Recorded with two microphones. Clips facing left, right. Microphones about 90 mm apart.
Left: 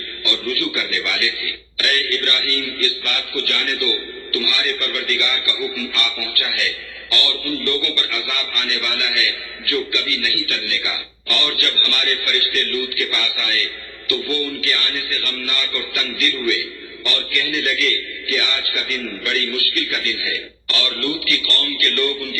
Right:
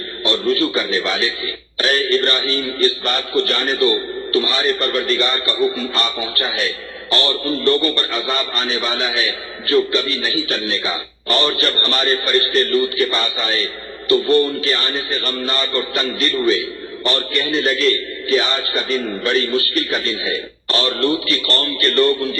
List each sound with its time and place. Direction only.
0.3 s a man's voice: 35° right (ahead or behind)